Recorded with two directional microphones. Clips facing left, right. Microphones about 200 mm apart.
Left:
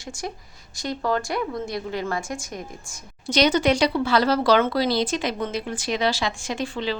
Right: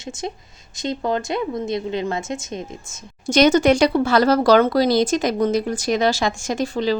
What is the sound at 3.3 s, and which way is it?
Speech, 45° right (ahead or behind).